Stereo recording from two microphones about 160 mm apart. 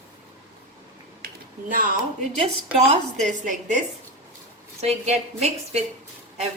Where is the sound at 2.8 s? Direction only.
50° right (ahead or behind).